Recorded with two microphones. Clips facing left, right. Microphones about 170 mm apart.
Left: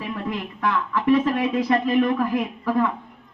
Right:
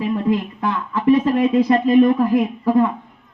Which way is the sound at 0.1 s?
30° right (ahead or behind).